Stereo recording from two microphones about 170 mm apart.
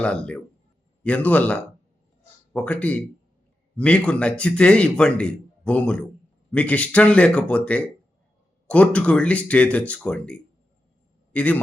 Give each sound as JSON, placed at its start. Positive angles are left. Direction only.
{"t": 0.0, "sound": "a man's voice", "side_deg": 5}